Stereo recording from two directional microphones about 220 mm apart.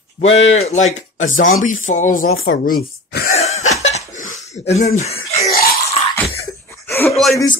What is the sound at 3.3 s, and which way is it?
Cough, 30° left (ahead or behind).